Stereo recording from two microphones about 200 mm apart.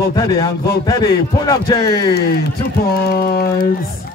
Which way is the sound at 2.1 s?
50° left (ahead or behind).